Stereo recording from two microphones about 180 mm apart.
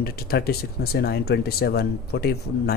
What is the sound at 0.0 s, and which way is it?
Speech, 60° left (ahead or behind).